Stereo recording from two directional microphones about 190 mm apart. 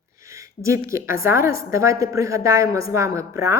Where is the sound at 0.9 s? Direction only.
15° right (ahead or behind).